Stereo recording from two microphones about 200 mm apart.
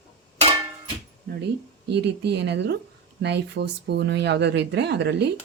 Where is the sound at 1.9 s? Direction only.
55° right (ahead or behind).